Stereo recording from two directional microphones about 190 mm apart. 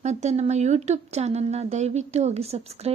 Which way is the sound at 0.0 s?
35° right (ahead or behind).